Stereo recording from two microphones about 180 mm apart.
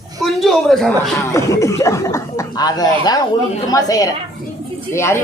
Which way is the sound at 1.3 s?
15° left (ahead or behind).